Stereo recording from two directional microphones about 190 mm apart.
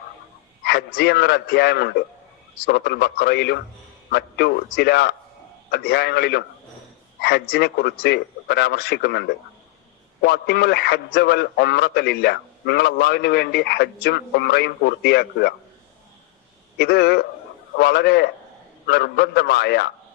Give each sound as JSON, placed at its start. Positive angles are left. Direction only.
{"t": 0.6, "sound": "a man's voice", "side_deg": 55}
{"t": 16.7, "sound": "a man's voice", "side_deg": 60}